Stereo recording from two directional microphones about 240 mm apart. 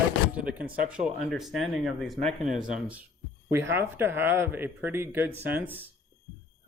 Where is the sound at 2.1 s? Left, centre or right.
Right.